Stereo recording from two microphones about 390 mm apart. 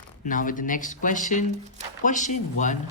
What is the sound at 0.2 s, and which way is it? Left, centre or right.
Speech, centre.